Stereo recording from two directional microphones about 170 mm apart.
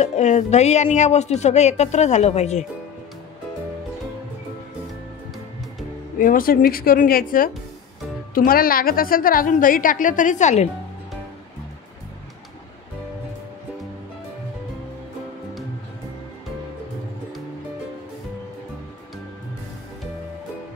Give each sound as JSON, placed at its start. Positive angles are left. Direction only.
{"t": 0.0, "sound": "speech", "side_deg": 40}
{"t": 6.1, "sound": "a woman's voice", "side_deg": 55}